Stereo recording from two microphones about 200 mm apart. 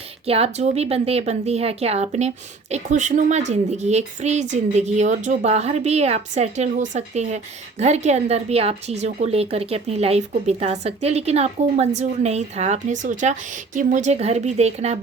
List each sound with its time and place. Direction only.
0.3 s a woman's voice: 30° right (ahead or behind)